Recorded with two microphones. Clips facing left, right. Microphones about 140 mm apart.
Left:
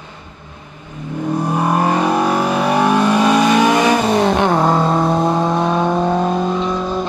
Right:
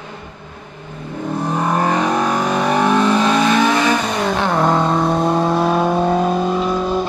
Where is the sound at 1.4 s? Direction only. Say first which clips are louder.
Left 1 dB; 10° left (ahead or behind).